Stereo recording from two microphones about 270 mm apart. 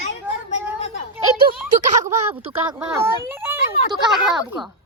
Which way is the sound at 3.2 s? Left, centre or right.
Centre.